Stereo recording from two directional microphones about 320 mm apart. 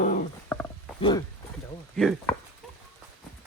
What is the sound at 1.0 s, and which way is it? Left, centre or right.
Speech, centre.